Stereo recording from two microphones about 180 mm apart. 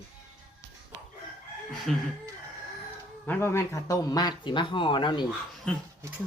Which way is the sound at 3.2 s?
10° left (ahead or behind).